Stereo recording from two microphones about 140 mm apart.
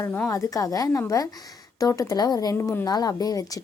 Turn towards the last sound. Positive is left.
turn(degrees=25)  # may be behind; listen again after turning